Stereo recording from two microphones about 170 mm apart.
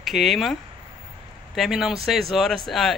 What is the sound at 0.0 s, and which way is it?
A man's voice, centre (ahead or behind).